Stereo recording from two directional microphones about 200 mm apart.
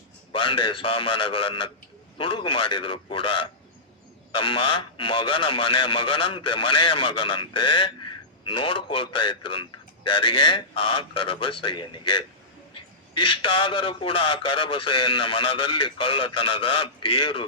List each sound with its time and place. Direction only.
0.3 s a man's voice: 25° left (ahead or behind)